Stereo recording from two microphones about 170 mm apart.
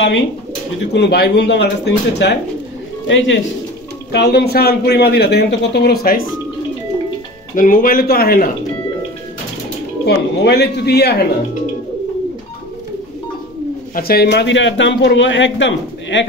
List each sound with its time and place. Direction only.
0.9 s a man's voice: 80° left
4.1 s a man's voice: 70° left (ahead or behind)
7.5 s a man's voice: 55° left (ahead or behind)
10.0 s a man's voice: 75° left (ahead or behind)
13.9 s a man's voice: 65° left (ahead or behind); by 16.3 s 90° left